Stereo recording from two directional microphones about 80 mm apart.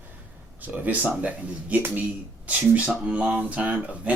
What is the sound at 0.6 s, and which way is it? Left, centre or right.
Speech, right.